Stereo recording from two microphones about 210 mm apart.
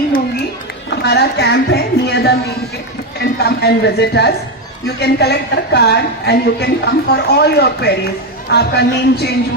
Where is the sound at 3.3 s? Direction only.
50° left (ahead or behind).